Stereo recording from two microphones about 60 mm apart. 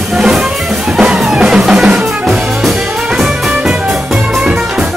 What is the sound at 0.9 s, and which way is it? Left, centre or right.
Music, centre.